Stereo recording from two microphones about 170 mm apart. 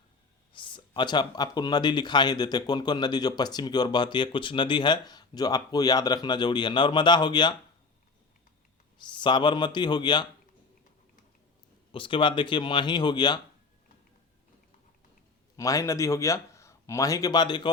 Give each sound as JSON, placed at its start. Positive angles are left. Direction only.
{"t": 0.5, "sound": "speech", "side_deg": 30}
{"t": 9.0, "sound": "speech", "side_deg": 25}
{"t": 11.9, "sound": "speech", "side_deg": 30}
{"t": 15.5, "sound": "speech", "side_deg": 20}